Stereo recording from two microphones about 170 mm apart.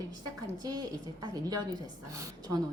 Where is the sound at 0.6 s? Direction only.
20° right (ahead or behind).